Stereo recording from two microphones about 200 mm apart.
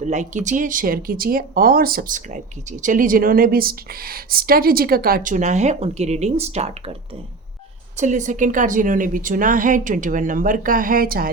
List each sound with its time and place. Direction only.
0.0 s speech: 35° right (ahead or behind)
7.9 s a woman's voice: 40° right (ahead or behind)